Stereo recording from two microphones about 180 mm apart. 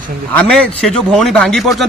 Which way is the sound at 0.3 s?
5° left (ahead or behind).